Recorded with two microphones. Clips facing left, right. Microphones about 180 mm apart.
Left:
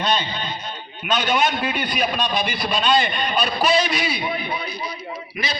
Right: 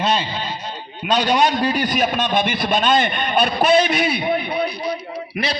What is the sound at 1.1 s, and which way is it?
A man's voice, 35° right (ahead or behind).